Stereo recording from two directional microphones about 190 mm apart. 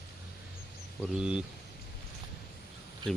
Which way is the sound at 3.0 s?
25° right (ahead or behind).